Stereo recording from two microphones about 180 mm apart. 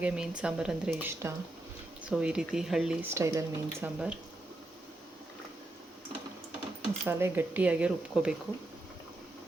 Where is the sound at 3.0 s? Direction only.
15° right (ahead or behind).